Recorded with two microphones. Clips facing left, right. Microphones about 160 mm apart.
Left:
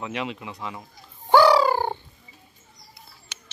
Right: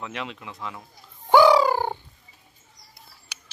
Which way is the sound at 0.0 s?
5° left (ahead or behind).